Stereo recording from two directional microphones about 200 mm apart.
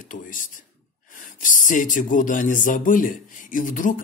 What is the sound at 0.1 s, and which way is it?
Speech, 40° left (ahead or behind).